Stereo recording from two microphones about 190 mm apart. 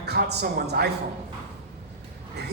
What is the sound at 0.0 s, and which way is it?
Speech, 60° right (ahead or behind).